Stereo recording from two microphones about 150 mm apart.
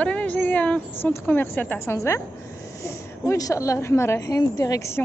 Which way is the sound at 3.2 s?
20° left (ahead or behind).